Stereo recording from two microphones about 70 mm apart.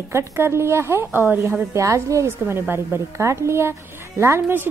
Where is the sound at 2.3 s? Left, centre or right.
Right.